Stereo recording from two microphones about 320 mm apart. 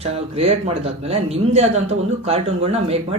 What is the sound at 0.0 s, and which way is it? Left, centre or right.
Speech, centre.